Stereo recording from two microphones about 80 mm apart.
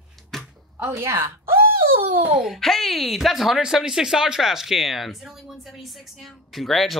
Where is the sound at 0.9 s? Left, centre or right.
Right.